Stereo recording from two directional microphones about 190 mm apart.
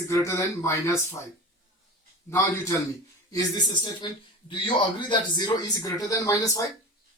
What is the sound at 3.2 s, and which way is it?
Speech, 20° left (ahead or behind).